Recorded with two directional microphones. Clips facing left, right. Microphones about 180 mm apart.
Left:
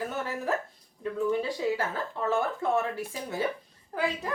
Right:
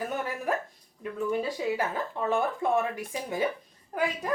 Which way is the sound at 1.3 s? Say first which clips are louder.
Right 1 dB; 15° right (ahead or behind).